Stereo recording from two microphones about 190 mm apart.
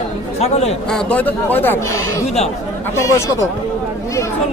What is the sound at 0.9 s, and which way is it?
Speech, 5° left (ahead or behind).